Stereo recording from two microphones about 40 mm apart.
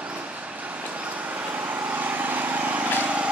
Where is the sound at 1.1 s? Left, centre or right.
Right.